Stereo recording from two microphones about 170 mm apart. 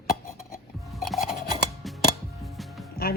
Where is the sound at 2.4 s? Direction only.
Centre (ahead or behind).